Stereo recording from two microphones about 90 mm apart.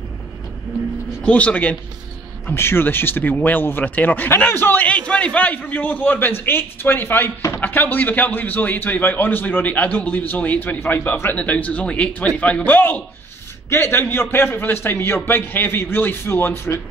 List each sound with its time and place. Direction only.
1.2 s a man's voice: 15° left (ahead or behind)